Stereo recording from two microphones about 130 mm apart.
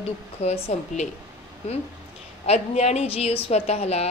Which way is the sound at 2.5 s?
55° left (ahead or behind).